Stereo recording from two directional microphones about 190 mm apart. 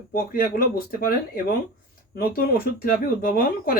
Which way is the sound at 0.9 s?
50° left (ahead or behind).